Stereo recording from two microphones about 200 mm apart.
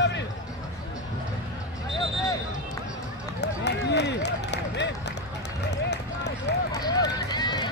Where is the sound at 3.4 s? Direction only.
60° left (ahead or behind).